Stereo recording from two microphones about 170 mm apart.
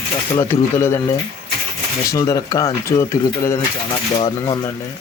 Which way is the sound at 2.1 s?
20° left (ahead or behind).